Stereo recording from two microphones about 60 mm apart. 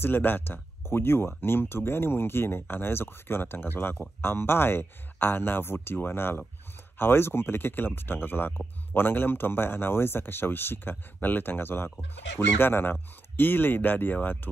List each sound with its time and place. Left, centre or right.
0.0 s speech: left